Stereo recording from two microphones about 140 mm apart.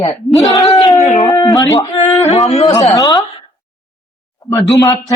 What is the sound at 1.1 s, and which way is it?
A man's voice, 25° left (ahead or behind).